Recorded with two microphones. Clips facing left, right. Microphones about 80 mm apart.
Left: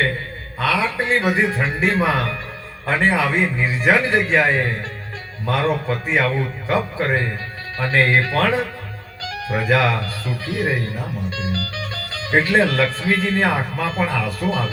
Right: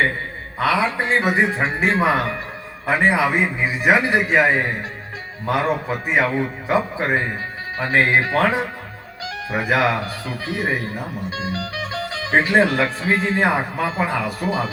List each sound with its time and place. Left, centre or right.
0.6 s a man's voice: right